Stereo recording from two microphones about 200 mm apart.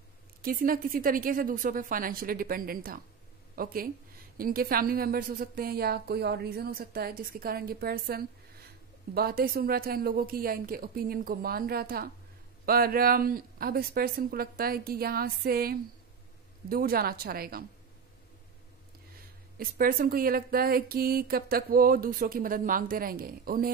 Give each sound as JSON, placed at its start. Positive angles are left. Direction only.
{"t": 0.4, "sound": "speech", "side_deg": -45}
{"t": 19.6, "sound": "speech", "side_deg": -45}